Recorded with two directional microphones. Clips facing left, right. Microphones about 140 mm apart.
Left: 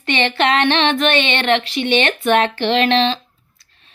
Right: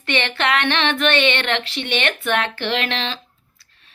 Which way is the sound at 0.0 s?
15° left (ahead or behind).